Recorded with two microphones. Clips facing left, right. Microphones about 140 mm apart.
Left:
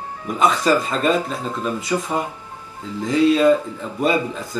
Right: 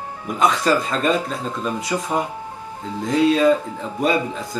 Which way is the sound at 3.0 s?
Centre (ahead or behind).